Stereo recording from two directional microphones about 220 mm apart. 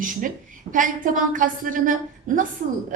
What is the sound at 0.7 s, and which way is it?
A woman's voice, 35° right (ahead or behind).